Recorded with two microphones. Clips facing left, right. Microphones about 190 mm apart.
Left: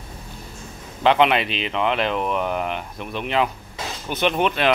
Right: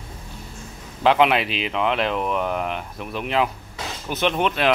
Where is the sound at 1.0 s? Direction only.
5° right (ahead or behind).